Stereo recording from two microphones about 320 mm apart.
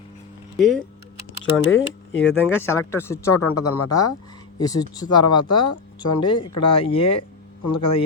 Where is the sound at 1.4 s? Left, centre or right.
Left.